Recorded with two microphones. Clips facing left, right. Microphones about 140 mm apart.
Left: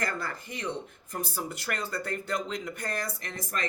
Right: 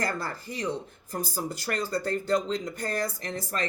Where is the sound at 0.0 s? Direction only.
35° right (ahead or behind).